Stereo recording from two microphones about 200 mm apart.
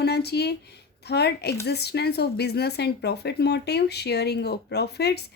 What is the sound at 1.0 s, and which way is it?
Speech, 55° left (ahead or behind).